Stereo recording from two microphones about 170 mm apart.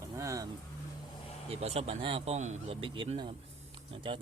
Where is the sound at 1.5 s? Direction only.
35° right (ahead or behind).